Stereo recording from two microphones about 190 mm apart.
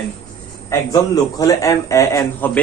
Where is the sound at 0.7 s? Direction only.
15° left (ahead or behind).